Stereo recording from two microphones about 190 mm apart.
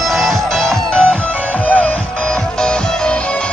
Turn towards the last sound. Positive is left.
turn(degrees=5)  # may be behind; listen again after turning